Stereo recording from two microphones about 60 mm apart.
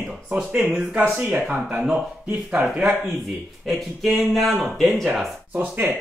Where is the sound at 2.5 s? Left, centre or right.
Centre.